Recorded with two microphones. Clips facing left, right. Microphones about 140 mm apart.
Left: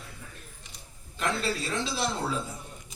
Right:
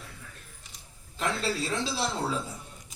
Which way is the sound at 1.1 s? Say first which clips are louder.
Even; 30° right (ahead or behind).